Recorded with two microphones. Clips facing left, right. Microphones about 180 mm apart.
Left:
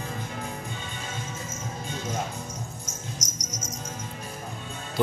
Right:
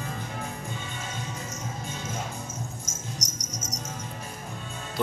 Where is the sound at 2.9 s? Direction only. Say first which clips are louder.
Even; 65° right (ahead or behind).